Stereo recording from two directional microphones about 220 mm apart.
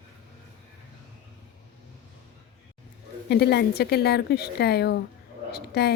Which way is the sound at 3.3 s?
45° left (ahead or behind).